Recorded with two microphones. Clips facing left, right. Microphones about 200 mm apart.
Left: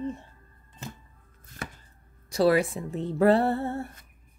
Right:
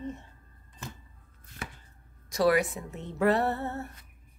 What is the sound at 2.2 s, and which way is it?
Speech, 30° left (ahead or behind).